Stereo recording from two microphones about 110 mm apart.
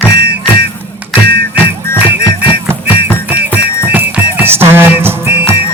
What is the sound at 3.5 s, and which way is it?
Music, 15° right (ahead or behind).